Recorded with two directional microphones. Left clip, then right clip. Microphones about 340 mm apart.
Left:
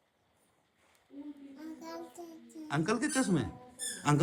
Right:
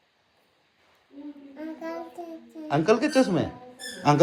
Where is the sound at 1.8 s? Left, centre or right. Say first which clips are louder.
Right 11 dB; right.